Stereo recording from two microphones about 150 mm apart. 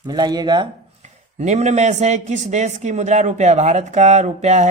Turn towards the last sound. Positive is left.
turn(degrees=-50)  # may be behind; listen again after turning